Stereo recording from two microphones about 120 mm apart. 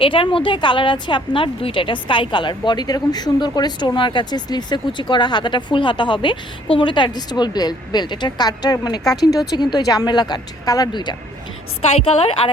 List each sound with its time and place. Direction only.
0.0 s a woman's voice: 45° left (ahead or behind)
11.9 s a woman's voice: 55° left (ahead or behind)